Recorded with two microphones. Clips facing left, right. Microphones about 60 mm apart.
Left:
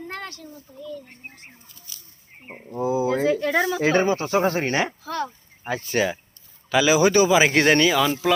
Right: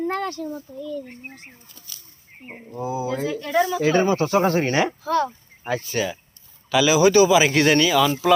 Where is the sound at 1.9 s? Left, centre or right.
Right.